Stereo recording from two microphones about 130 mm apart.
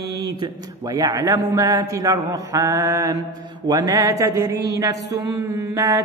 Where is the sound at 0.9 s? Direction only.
25° right (ahead or behind).